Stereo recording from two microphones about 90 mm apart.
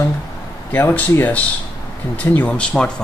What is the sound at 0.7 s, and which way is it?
Speech, 20° left (ahead or behind).